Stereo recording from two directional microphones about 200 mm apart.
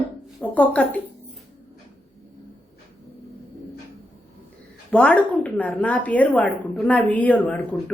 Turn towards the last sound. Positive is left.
turn(degrees=5)  # may be behind; listen again after turning